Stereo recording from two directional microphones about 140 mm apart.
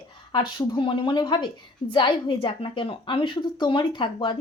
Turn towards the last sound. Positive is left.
turn(degrees=35)  # may be behind; listen again after turning